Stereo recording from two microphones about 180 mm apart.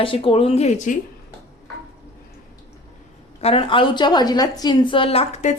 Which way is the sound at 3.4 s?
30° left (ahead or behind).